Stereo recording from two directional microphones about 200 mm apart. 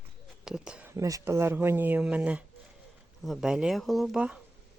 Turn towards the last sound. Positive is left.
turn(degrees=-5)  # may be behind; listen again after turning